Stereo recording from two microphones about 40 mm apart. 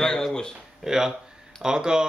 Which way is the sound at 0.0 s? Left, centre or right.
Centre.